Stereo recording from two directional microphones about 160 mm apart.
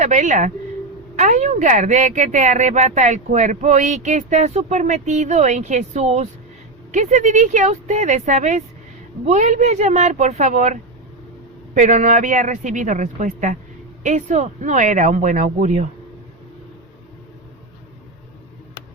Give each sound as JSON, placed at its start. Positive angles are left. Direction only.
{"t": 0.0, "sound": "speech", "side_deg": -50}